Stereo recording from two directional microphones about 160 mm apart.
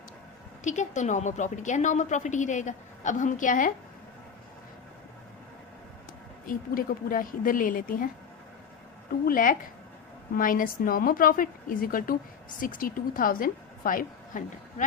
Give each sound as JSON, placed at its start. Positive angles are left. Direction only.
{"t": 0.6, "sound": "a woman's voice", "side_deg": 50}
{"t": 6.5, "sound": "a woman's voice", "side_deg": 60}
{"t": 9.2, "sound": "a woman's voice", "side_deg": 55}